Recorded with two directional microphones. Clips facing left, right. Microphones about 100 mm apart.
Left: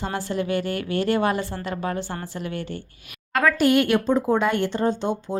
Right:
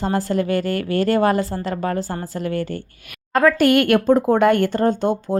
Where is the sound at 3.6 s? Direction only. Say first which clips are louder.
Right 4 dB; 55° right (ahead or behind).